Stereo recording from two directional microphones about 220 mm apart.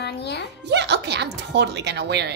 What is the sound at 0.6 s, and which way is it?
Speech, 50° right (ahead or behind).